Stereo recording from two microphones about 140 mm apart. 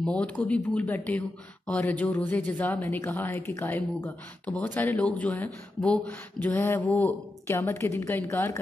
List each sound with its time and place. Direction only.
0.0 s a woman's voice: 10° left (ahead or behind)